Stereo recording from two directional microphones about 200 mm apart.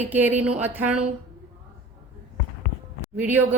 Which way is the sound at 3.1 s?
10° right (ahead or behind).